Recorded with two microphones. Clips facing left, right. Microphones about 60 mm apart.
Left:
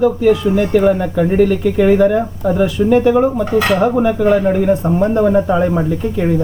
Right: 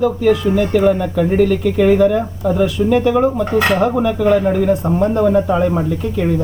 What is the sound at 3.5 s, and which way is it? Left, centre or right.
Speech, right.